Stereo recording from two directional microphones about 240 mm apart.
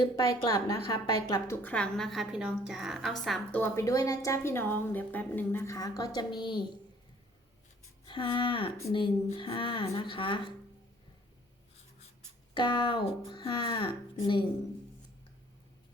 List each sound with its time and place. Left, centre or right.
0.0 s a woman's voice: centre
8.0 s speech: left
12.5 s speech: centre